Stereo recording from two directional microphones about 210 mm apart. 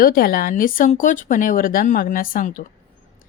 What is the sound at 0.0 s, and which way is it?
Speech, 45° left (ahead or behind).